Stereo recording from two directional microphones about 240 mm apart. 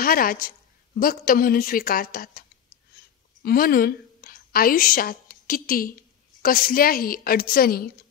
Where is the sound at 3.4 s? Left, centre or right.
Left.